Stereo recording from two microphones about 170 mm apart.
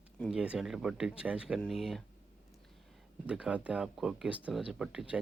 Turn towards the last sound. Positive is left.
turn(degrees=-5)  # may be behind; listen again after turning